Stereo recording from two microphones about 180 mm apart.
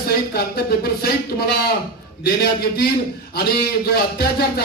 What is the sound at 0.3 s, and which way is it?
Speech, 60° left (ahead or behind).